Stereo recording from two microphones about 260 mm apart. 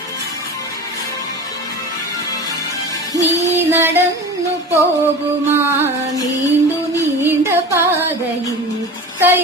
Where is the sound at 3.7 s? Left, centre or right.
Centre.